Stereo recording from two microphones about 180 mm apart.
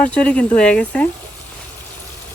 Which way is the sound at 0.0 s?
5° left (ahead or behind).